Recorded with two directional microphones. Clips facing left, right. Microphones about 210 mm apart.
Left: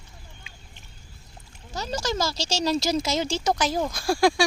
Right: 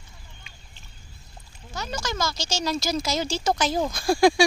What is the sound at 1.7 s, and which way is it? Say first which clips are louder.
Speech: left 3 dB; 35° left (ahead or behind).